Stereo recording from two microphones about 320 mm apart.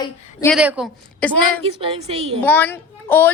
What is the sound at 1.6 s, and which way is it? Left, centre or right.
Speech, centre.